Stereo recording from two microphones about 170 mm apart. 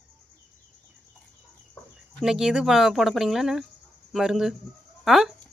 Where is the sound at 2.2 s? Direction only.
5° right (ahead or behind).